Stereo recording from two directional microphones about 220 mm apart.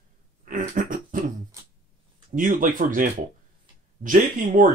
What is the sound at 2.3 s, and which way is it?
Speech, 35° right (ahead or behind).